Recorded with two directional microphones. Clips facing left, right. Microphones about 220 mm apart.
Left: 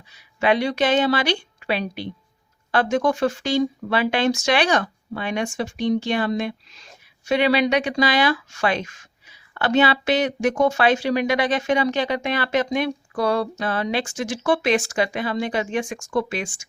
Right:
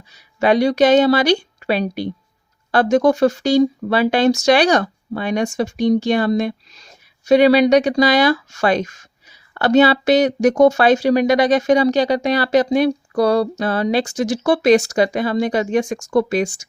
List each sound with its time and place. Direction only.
0.1 s speech: 40° right (ahead or behind)